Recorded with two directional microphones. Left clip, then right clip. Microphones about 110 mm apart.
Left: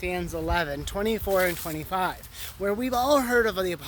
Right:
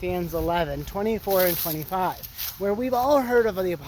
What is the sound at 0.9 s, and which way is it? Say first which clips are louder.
Speech: right 1 dB; 45° left (ahead or behind).